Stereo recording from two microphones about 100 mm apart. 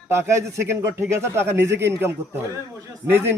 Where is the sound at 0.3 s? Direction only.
30° right (ahead or behind).